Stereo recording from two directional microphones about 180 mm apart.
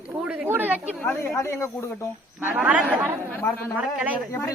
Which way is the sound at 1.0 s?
10° left (ahead or behind).